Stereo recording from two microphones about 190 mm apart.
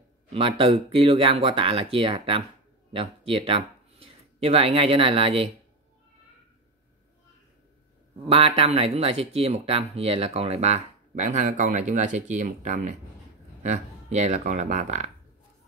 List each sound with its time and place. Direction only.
0.3 s speech: 30° right (ahead or behind)
8.3 s speech: 30° right (ahead or behind)